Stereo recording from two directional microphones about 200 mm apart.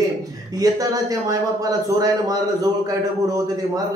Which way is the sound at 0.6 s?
15° right (ahead or behind).